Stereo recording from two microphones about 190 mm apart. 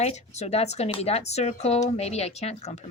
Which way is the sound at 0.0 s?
35° left (ahead or behind).